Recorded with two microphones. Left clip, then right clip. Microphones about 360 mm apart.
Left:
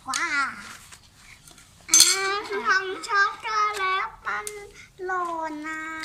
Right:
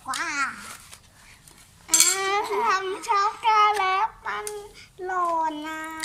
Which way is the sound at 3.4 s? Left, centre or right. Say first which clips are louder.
Right 5 dB; centre.